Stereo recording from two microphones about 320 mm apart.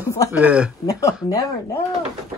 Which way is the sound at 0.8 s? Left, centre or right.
Centre.